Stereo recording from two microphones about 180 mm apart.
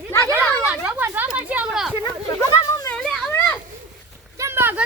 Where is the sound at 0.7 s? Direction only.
10° right (ahead or behind).